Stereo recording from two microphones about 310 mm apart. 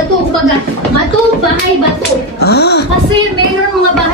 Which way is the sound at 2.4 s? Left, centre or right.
Left.